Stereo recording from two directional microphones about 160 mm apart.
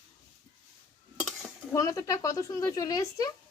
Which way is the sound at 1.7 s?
20° left (ahead or behind).